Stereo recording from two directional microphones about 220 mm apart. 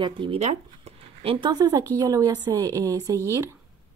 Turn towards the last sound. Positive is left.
turn(degrees=-15)  # may be behind; listen again after turning